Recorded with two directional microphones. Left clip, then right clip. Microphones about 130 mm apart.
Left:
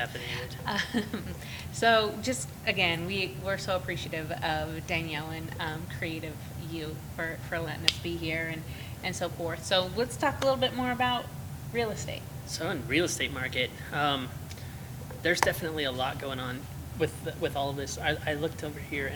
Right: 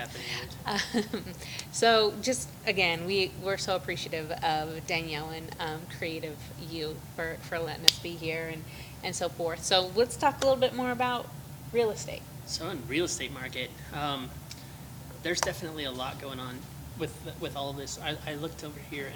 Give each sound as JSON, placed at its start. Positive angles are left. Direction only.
{"t": 0.2, "sound": "speech", "side_deg": -40}
{"t": 12.5, "sound": "speech", "side_deg": 60}